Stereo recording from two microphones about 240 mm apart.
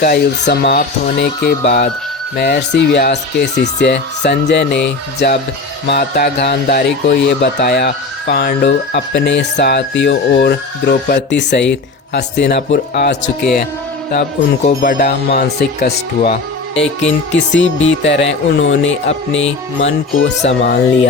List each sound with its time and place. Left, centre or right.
0.0 s speech: left
18.0 s speech: left